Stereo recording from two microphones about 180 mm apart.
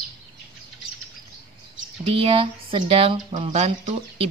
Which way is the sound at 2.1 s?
30° right (ahead or behind).